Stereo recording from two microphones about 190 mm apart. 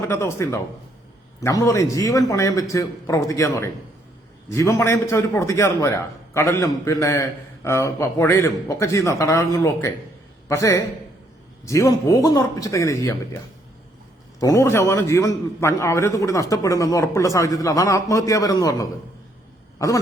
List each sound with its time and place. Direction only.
0.0 s a man's voice: 15° left (ahead or behind)
14.3 s a man's voice: 15° left (ahead or behind)